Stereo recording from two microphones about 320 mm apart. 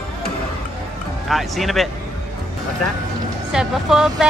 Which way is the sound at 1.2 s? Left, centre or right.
Centre.